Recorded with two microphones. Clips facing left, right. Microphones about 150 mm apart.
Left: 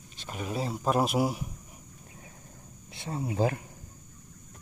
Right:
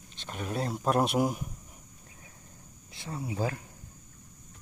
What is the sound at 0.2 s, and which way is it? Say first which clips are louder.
Speech: even; 5° left (ahead or behind).